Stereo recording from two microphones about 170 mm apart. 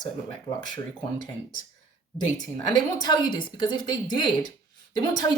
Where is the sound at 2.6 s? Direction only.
25° left (ahead or behind).